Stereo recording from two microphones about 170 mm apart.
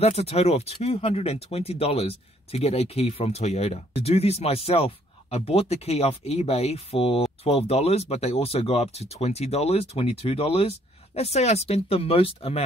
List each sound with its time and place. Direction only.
0.0 s speech: 35° left (ahead or behind)